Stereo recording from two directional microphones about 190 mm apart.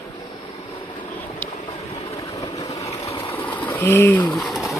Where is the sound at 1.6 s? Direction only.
30° left (ahead or behind).